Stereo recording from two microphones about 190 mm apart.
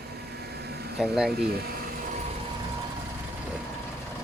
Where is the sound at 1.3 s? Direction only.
55° right (ahead or behind).